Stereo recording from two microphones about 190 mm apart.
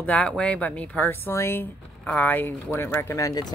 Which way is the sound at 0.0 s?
5° left (ahead or behind).